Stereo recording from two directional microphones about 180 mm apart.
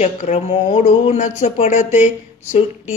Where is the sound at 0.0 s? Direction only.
40° left (ahead or behind).